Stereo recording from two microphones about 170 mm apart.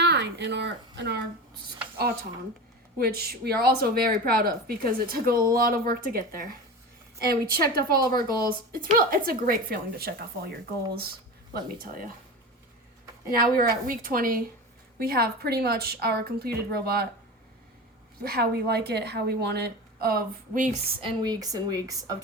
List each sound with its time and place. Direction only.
0.0 s speech: 90° right
3.0 s speech: 65° right (ahead or behind)
11.5 s speech: 60° right (ahead or behind)
13.3 s a woman's voice: 60° right (ahead or behind)
18.2 s a woman's voice: 65° right (ahead or behind); by 20.7 s 50° right (ahead or behind)
21.0 s speech: 25° right (ahead or behind)